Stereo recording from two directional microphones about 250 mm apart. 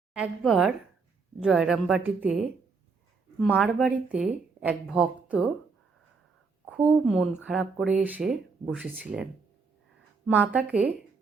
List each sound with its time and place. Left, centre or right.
0.1 s speech: centre
6.7 s speech: centre
10.2 s speech: centre